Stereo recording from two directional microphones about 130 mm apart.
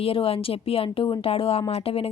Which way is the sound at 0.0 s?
45° left (ahead or behind).